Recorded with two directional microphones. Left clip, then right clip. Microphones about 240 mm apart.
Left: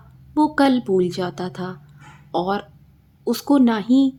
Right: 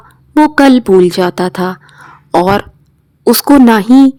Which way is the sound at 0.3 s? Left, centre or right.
Right.